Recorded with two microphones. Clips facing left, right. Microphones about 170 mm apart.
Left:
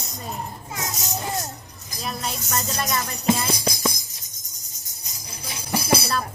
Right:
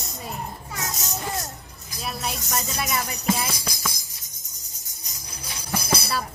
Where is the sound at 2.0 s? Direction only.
5° right (ahead or behind).